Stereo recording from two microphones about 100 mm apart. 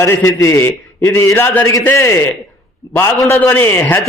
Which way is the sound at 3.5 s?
20° left (ahead or behind).